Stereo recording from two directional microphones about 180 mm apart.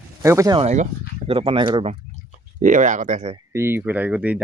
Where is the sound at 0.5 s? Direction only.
40° right (ahead or behind).